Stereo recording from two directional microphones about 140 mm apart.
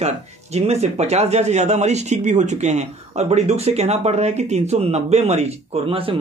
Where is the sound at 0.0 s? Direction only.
50° right (ahead or behind).